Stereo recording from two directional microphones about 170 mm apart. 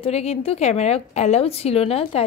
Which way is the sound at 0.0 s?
35° left (ahead or behind).